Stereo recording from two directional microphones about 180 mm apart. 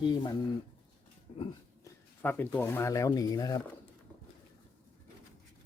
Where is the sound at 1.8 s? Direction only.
10° left (ahead or behind).